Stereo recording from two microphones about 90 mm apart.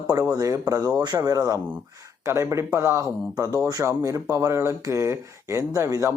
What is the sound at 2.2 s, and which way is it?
Speech, 30° right (ahead or behind).